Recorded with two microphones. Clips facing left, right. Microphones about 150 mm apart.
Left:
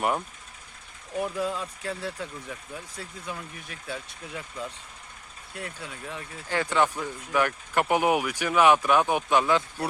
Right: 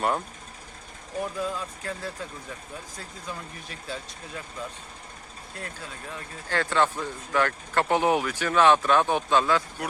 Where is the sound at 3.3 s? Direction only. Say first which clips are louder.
Right 1 dB; 10° left (ahead or behind).